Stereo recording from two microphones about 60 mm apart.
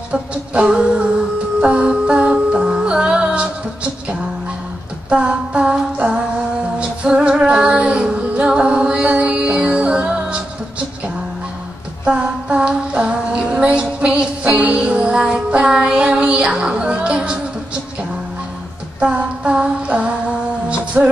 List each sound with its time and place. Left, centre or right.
0.1 s music: centre
5.1 s humming: centre
6.8 s female singing: centre
12.0 s female singing: centre
14.8 s child singing: centre
18.9 s music: centre